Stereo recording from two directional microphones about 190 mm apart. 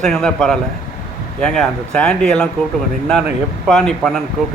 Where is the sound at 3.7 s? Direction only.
5° left (ahead or behind).